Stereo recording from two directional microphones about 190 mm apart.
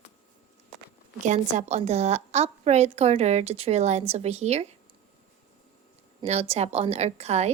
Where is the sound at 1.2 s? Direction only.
40° right (ahead or behind).